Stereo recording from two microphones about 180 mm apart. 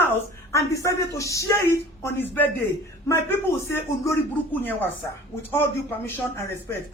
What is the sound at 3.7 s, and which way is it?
Speech, 10° left (ahead or behind).